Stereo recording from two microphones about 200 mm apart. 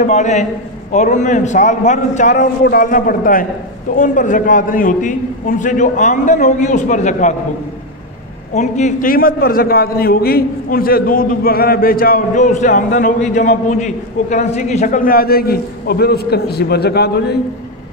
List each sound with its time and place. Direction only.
0.0 s a man's voice: 35° left (ahead or behind)
8.5 s a man's voice: 35° left (ahead or behind); by 17.4 s 55° left (ahead or behind)